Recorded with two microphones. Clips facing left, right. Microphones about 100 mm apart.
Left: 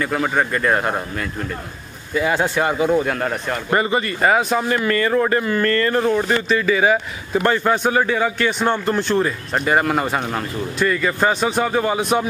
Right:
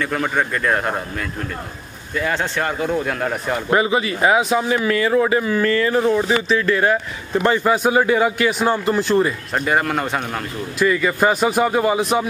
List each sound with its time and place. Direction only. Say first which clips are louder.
0.0 s a man's voice: left 1 dB; 5° left (ahead or behind)
2.1 s a man's voice: left 3 dB; 10° left (ahead or behind)